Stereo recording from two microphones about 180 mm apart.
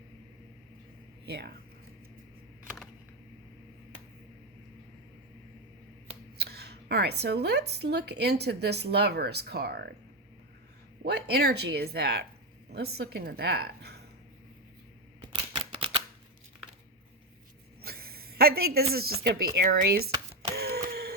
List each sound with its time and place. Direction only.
1.2 s speech: 60° right (ahead or behind)
6.3 s speech: 65° right (ahead or behind)
11.0 s speech: 60° right (ahead or behind)
15.3 s typewriter: 30° right (ahead or behind)
17.8 s a sound: 60° right (ahead or behind)
18.9 s speech: 60° right (ahead or behind)
20.6 s a sound: 60° right (ahead or behind)